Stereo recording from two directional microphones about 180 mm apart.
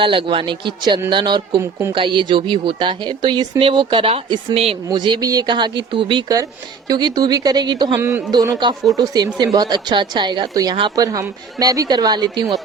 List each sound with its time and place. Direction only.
0.0 s a woman's voice: 30° right (ahead or behind)
7.9 s a woman's voice: 10° right (ahead or behind)